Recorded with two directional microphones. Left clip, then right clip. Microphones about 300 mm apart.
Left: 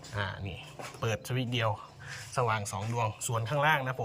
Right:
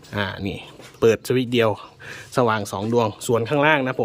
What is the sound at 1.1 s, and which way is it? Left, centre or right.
Speech, centre.